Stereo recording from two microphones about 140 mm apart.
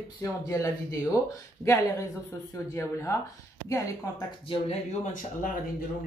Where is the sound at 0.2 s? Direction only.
25° left (ahead or behind).